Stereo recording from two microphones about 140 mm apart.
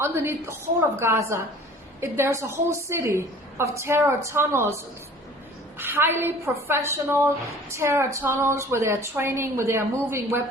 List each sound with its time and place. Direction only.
0.0 s a woman's voice: 15° right (ahead or behind)
5.7 s a woman's voice: 15° right (ahead or behind)